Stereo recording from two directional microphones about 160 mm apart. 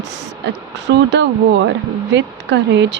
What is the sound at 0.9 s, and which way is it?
Speech, 90° right.